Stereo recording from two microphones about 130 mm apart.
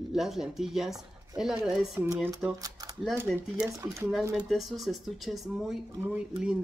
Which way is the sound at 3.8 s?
20° right (ahead or behind).